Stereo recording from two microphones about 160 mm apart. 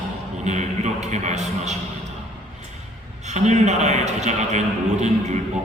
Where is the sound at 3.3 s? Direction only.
45° right (ahead or behind).